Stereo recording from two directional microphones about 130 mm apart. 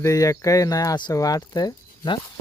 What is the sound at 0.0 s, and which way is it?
Speech, 25° left (ahead or behind).